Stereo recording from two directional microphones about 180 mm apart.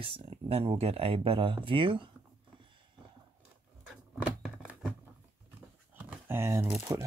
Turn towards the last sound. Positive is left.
turn(degrees=-15)  # may be behind; listen again after turning